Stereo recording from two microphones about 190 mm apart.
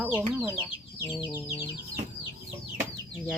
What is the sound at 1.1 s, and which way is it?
Chicken, 25° left (ahead or behind).